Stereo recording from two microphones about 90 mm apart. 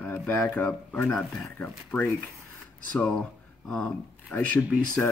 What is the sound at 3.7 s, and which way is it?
Speech, 10° left (ahead or behind).